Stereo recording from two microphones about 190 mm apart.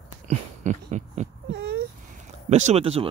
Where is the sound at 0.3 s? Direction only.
40° right (ahead or behind).